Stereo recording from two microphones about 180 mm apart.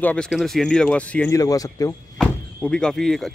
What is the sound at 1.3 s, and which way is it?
Speech, 20° left (ahead or behind).